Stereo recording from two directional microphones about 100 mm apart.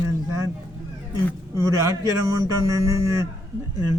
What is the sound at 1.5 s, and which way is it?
A man's voice, 30° right (ahead or behind).